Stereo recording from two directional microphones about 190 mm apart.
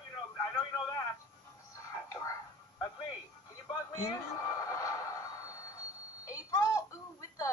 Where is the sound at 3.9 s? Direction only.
15° left (ahead or behind).